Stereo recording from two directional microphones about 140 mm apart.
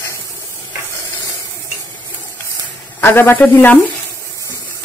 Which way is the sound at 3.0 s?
15° left (ahead or behind).